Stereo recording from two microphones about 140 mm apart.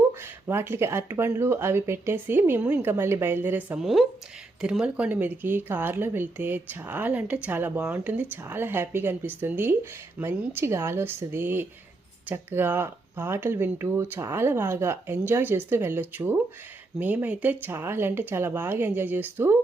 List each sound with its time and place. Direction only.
0.1 s speech: 15° right (ahead or behind)